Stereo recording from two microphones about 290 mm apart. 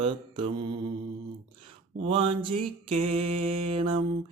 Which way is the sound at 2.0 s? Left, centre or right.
Centre.